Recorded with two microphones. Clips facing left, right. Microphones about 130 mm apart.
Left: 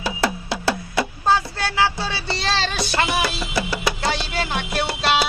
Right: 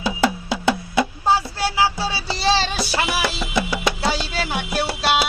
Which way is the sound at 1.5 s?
10° right (ahead or behind).